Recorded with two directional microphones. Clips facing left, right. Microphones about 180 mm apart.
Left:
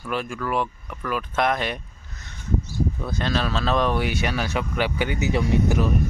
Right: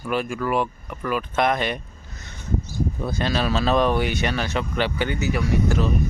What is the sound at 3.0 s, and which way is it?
Speech, 5° right (ahead or behind).